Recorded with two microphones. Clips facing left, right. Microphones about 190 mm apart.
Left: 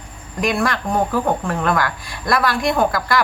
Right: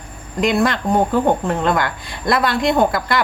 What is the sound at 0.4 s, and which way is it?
Speech, 20° right (ahead or behind).